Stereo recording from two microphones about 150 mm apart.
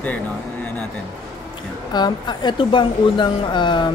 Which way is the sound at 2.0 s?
30° left (ahead or behind).